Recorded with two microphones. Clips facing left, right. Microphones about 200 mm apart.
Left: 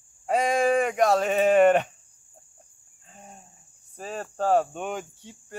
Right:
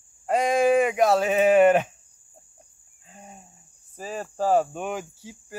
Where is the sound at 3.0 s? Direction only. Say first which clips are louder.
Right 2 dB; centre (ahead or behind).